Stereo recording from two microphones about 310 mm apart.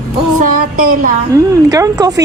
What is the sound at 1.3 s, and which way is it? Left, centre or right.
Speech, centre.